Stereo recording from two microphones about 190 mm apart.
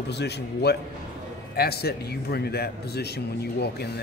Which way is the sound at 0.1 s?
60° left (ahead or behind).